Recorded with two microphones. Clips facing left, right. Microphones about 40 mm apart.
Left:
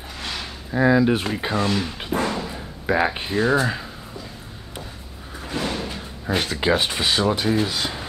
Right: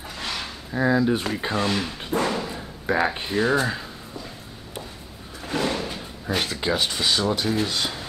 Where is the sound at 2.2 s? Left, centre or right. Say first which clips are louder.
Even; centre.